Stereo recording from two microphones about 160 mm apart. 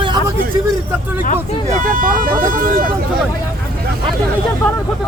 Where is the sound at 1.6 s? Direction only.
55° right (ahead or behind).